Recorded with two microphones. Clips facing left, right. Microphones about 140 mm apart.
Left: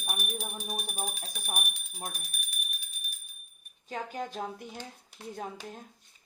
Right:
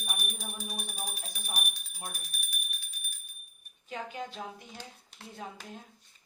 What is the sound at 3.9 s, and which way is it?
Speech, 40° left (ahead or behind).